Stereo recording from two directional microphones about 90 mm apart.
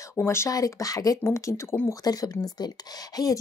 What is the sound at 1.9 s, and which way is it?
Speech, 45° left (ahead or behind).